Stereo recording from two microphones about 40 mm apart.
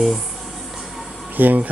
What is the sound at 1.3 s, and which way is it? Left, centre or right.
Speech, right.